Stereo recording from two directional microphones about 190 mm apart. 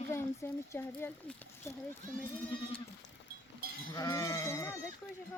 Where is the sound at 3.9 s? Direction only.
15° left (ahead or behind).